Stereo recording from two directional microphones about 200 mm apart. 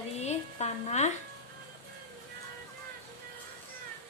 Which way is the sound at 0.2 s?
35° left (ahead or behind).